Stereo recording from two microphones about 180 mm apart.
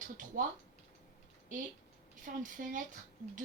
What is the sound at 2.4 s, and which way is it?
Speech, 45° right (ahead or behind).